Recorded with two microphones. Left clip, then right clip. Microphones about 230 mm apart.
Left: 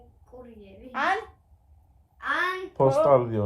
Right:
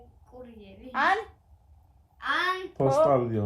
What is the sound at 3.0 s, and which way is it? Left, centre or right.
Speech, left.